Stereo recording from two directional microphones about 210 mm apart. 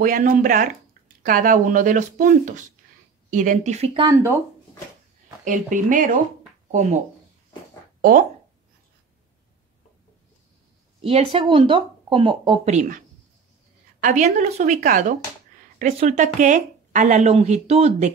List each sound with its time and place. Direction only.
0.0 s speech: 40° right (ahead or behind)
4.1 s speech: 10° right (ahead or behind)
5.4 s speech: 40° right (ahead or behind)
8.0 s speech: 40° right (ahead or behind)
11.0 s speech: 25° right (ahead or behind)
14.0 s speech: 35° right (ahead or behind)